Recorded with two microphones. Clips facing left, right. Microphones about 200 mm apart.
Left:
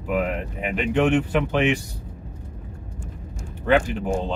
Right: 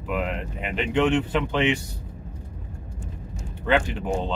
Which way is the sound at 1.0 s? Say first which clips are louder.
Left 2 dB; 15° left (ahead or behind).